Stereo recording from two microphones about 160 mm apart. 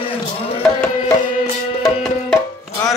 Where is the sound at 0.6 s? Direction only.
10° left (ahead or behind).